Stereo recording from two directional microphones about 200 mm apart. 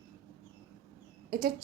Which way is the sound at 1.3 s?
50° right (ahead or behind).